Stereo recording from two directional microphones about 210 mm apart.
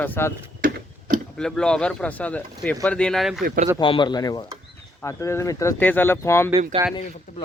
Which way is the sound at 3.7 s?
25° left (ahead or behind).